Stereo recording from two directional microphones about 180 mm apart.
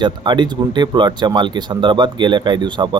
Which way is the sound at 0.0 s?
25° right (ahead or behind).